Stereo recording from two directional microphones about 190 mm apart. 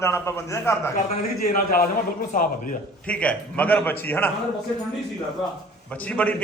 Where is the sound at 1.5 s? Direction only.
50° left (ahead or behind).